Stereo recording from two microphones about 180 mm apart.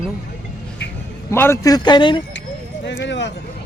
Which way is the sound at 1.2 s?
15° left (ahead or behind).